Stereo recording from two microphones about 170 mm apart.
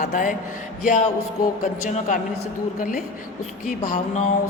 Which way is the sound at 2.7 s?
55° left (ahead or behind).